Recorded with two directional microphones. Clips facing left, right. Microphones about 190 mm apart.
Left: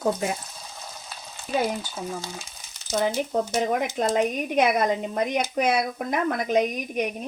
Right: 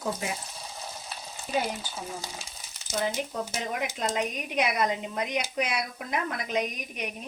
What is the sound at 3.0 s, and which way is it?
A woman's voice, 50° left (ahead or behind).